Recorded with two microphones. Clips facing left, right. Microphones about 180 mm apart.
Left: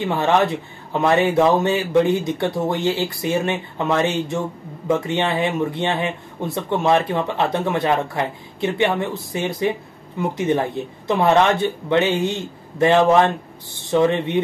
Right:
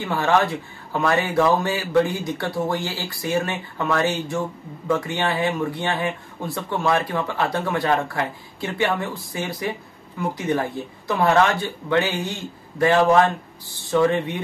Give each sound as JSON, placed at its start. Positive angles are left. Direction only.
{"t": 0.0, "sound": "speech", "side_deg": 20}